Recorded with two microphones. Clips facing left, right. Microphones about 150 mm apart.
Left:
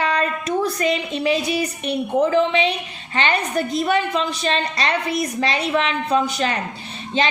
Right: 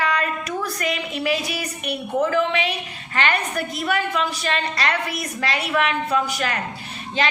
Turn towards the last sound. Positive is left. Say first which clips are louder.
# left 2 dB
turn(degrees=25)  # may be behind; listen again after turning